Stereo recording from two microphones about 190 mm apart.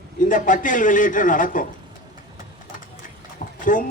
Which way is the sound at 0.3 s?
45° left (ahead or behind).